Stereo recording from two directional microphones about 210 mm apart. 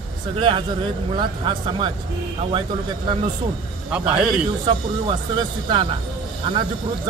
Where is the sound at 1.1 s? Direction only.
25° right (ahead or behind).